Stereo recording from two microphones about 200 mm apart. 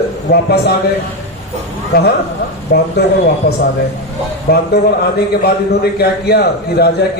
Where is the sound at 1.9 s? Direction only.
50° left (ahead or behind).